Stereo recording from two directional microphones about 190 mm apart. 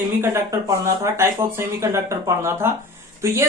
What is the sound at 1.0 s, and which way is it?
Speech, 15° right (ahead or behind).